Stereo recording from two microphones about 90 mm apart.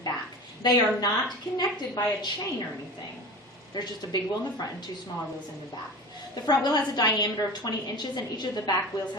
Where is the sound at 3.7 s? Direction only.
50° left (ahead or behind).